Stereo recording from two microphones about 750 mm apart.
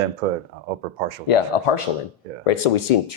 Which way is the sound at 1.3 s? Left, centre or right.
Left.